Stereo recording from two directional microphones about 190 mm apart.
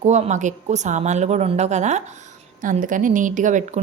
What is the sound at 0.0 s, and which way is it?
A woman's voice, 35° right (ahead or behind).